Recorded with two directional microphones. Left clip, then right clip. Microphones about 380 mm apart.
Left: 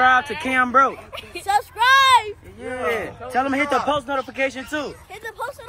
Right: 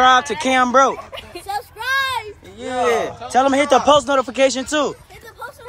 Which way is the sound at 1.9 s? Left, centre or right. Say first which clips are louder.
Left 6 dB; centre.